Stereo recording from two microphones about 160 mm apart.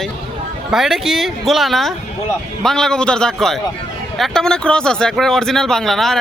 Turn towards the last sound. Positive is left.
turn(degrees=0)  # may be behind; listen again after turning